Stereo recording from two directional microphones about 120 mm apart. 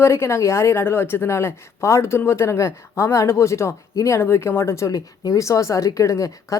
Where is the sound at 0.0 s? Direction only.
20° left (ahead or behind).